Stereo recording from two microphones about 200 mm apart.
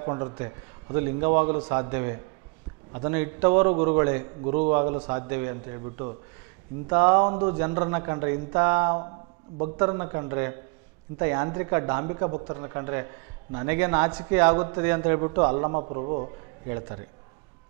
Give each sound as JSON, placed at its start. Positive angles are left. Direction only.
{"t": 0.0, "sound": "a man's voice", "side_deg": -25}
{"t": 0.9, "sound": "speech", "side_deg": -15}
{"t": 6.9, "sound": "speech", "side_deg": -15}
{"t": 15.6, "sound": "speech", "side_deg": -30}